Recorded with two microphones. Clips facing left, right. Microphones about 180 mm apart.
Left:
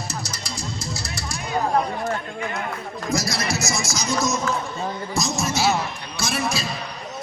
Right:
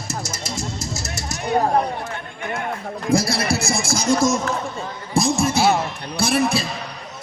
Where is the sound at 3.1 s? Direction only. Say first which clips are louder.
Right 6 dB; 30° right (ahead or behind).